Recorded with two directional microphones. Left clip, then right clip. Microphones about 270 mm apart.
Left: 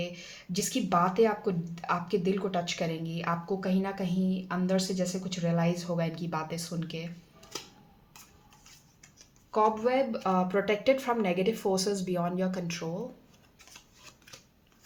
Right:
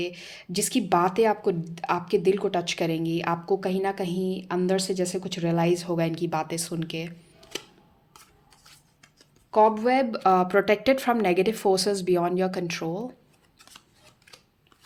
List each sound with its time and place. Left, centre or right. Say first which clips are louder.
0.0 s speech: right 5 dB; right
9.5 s speech: right 6 dB; right